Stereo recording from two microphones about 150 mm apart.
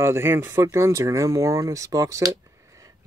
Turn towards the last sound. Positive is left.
turn(degrees=-20)  # may be behind; listen again after turning